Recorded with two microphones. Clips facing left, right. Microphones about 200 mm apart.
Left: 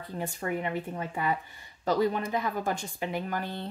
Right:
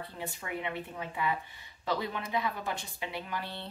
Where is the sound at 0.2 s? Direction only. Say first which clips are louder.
Left 6 dB; 45° left (ahead or behind).